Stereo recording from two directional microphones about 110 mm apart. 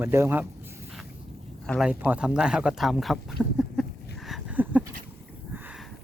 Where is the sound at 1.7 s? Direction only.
10° left (ahead or behind).